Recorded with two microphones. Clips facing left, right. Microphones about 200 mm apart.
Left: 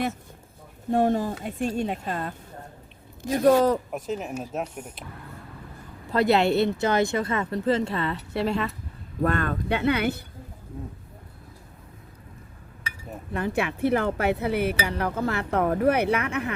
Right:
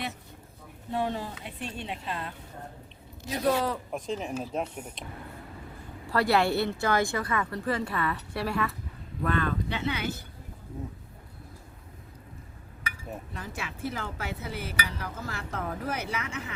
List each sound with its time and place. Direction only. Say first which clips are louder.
0.9 s speech: left 9 dB; 45° left (ahead or behind)
3.9 s speech: left 2 dB; 5° left (ahead or behind)
6.1 s speech: left 4 dB; 20° left (ahead or behind)
9.2 s speech: left 3 dB; 45° left (ahead or behind)
13.3 s speech: left 12 dB; 60° left (ahead or behind)